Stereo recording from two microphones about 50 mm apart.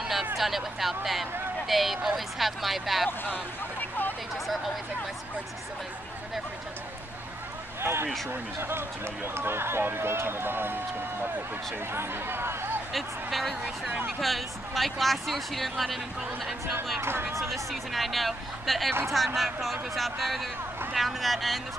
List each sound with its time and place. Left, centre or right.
0.4 s speech: centre
7.8 s speech: right
12.9 s speech: centre
17.0 s speech: right
17.4 s speech: centre